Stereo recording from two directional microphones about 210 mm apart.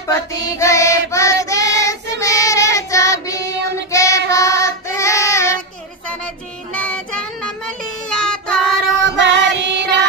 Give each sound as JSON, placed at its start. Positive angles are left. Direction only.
{"t": 0.0, "sound": "child singing", "side_deg": 15}
{"t": 6.7, "sound": "child singing", "side_deg": 5}
{"t": 9.1, "sound": "music", "side_deg": -60}